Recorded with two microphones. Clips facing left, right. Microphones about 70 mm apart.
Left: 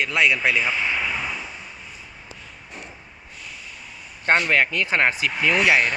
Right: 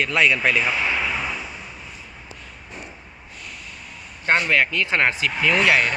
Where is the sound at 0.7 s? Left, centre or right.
Centre.